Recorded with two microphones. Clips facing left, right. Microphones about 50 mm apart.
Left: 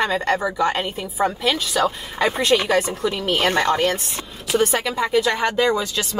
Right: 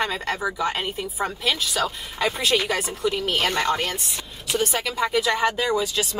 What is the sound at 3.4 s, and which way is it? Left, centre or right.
Speech, left.